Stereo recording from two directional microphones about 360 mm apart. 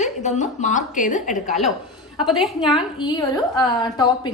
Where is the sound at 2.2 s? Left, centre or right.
Centre.